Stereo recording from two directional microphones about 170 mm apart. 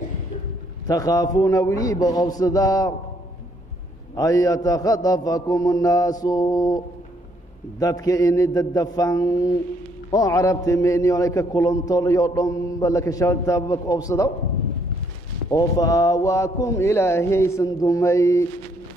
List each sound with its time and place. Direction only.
0.8 s a man's voice: 20° left (ahead or behind)
4.1 s a man's voice: 20° left (ahead or behind)
7.8 s a man's voice: 20° left (ahead or behind)
15.5 s a man's voice: 20° left (ahead or behind)